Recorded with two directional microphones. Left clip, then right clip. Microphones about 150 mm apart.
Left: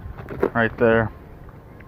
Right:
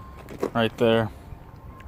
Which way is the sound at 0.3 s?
45° left (ahead or behind).